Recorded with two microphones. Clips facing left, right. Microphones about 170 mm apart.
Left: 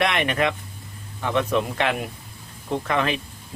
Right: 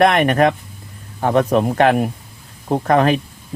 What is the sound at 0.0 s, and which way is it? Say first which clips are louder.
Speech: right 9 dB; 45° right (ahead or behind).